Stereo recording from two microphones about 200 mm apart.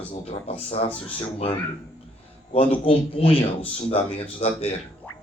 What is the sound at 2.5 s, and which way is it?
A man's voice, 30° left (ahead or behind).